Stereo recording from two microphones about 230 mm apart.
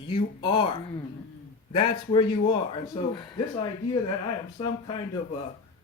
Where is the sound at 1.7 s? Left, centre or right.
Left.